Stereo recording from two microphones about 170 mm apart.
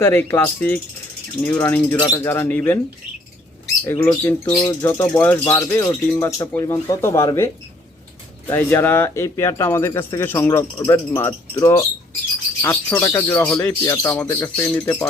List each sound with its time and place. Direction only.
0.0 s speech: 15° left (ahead or behind)
3.8 s speech: 10° left (ahead or behind)